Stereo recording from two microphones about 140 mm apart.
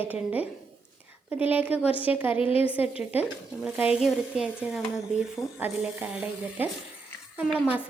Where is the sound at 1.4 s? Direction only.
10° right (ahead or behind).